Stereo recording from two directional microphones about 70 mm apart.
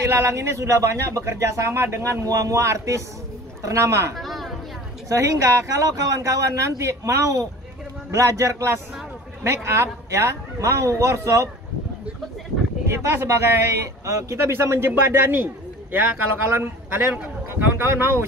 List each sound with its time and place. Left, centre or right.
0.0 s speech: right
4.2 s a sound: centre
5.1 s speech: right
12.8 s a man's voice: right